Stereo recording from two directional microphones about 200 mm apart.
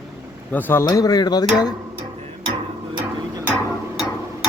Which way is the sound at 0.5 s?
10° left (ahead or behind).